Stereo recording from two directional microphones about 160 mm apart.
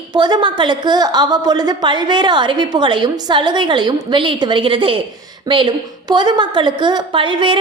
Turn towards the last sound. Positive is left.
turn(degrees=-30)  # may be behind; listen again after turning